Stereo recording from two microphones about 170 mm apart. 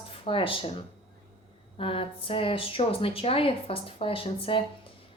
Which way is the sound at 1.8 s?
30° left (ahead or behind).